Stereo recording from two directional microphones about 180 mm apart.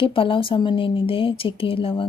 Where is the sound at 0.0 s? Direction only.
30° left (ahead or behind).